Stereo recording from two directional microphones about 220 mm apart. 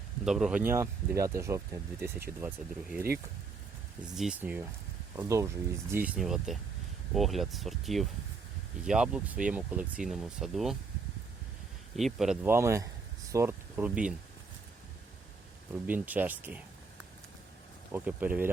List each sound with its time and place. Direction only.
0.3 s speech: centre (ahead or behind)
4.1 s speech: 5° right (ahead or behind)
6.1 s speech: centre (ahead or behind)
11.9 s speech: centre (ahead or behind)
15.7 s speech: 5° right (ahead or behind)
17.9 s speech: 5° right (ahead or behind)